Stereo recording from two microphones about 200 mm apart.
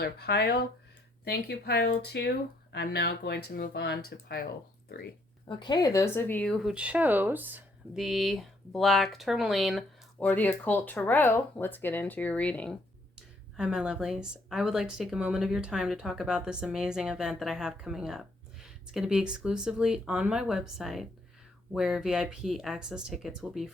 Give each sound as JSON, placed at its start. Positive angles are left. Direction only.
{"t": 0.0, "sound": "speech", "side_deg": 55}
{"t": 5.5, "sound": "speech", "side_deg": 20}
{"t": 13.6, "sound": "speech", "side_deg": -5}